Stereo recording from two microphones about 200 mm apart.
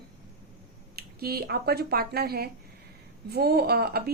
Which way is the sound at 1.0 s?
50° right (ahead or behind).